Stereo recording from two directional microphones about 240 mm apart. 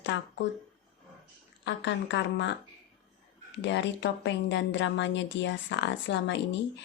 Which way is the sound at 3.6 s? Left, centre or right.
Left.